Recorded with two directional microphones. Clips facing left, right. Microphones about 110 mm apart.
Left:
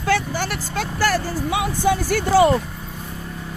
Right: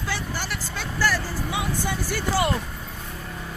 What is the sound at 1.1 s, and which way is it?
Speech, 65° left (ahead or behind).